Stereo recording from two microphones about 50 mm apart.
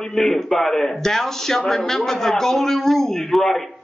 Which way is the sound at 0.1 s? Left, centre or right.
Centre.